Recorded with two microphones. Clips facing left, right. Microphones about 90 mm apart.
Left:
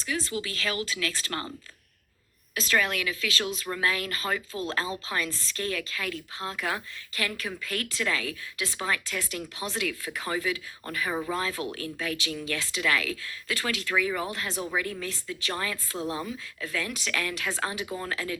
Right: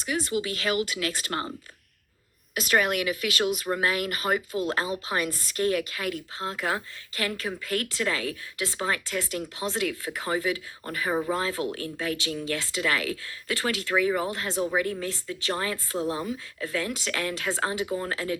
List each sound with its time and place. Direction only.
0.1 s speech: 30° right (ahead or behind)
2.6 s speech: 30° right (ahead or behind)